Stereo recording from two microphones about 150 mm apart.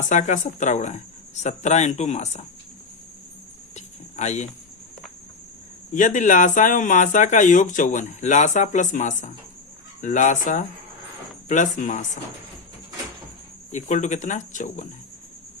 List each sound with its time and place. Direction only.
0.0 s speech: 55° left (ahead or behind)
3.8 s a sound: 50° left (ahead or behind)
5.9 s speech: 55° left (ahead or behind)
13.7 s speech: 55° left (ahead or behind)